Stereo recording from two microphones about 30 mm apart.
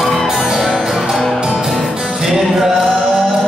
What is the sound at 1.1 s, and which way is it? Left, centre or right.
Music, centre.